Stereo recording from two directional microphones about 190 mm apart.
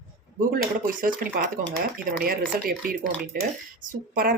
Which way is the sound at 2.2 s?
50° right (ahead or behind).